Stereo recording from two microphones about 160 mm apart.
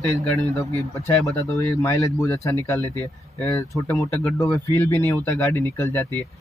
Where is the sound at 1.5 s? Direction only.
15° left (ahead or behind).